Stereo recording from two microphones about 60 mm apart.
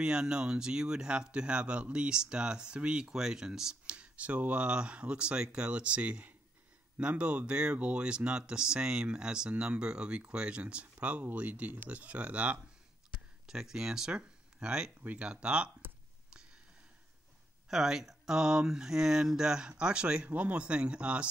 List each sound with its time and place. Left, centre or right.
0.0 s speech: centre
13.1 s a sound: centre
15.0 s speech: centre
17.6 s speech: centre